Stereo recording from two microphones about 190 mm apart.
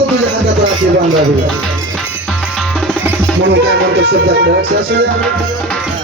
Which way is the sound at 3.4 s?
60° right (ahead or behind).